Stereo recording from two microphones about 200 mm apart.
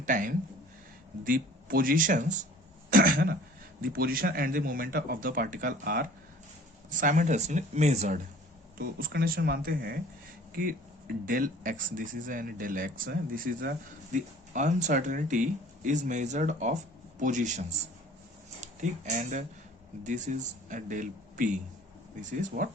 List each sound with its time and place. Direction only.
0.0 s speech: 40° right (ahead or behind)
3.8 s speech: 50° right (ahead or behind)
6.9 s speech: 40° right (ahead or behind)